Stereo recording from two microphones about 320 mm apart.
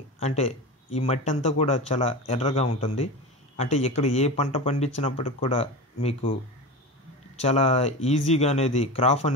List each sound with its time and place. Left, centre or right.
0.2 s speech: centre
7.4 s speech: centre